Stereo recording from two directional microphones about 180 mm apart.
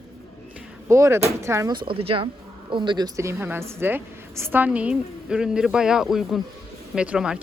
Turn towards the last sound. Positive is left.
turn(degrees=-5)  # may be behind; listen again after turning